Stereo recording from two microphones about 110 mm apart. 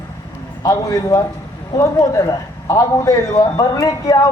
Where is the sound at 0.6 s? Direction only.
35° left (ahead or behind).